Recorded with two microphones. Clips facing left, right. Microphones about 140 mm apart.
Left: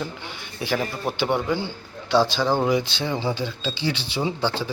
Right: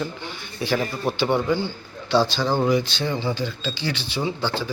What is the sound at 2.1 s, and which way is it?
Speech, 20° left (ahead or behind).